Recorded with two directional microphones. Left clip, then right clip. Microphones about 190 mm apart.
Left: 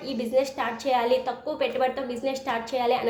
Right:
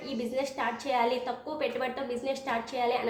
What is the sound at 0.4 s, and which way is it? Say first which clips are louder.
A woman's voice: left 7 dB; 35° left (ahead or behind).